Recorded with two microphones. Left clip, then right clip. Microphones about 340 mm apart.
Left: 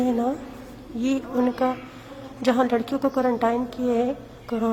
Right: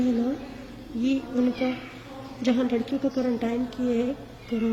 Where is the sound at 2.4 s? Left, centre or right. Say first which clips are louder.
Left 5 dB; centre.